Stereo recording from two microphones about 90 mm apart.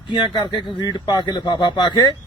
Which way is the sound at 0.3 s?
60° left (ahead or behind).